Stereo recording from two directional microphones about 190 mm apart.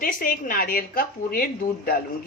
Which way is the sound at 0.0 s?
50° left (ahead or behind).